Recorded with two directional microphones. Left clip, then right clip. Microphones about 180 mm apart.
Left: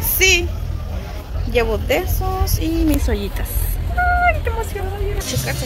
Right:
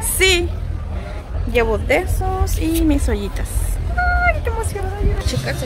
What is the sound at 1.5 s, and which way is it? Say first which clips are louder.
A woman's voice: right 1 dB; 15° right (ahead or behind).